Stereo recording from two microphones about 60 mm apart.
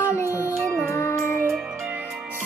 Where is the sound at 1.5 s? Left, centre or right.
Centre.